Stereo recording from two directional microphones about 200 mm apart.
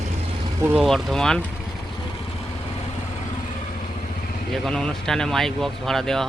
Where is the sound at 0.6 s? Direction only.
5° right (ahead or behind).